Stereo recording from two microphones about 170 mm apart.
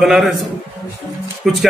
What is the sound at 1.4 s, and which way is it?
Speech, centre (ahead or behind).